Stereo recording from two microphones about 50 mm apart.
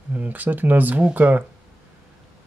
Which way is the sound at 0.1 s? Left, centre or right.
Right.